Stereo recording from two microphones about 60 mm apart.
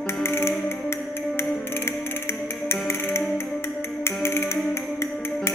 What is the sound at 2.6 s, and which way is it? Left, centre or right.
Music, left.